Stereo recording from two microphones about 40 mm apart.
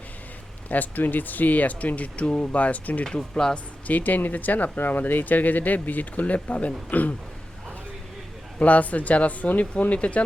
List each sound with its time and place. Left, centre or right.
0.7 s speech: left
3.2 s speech: centre
3.8 s speech: left
8.5 s speech: left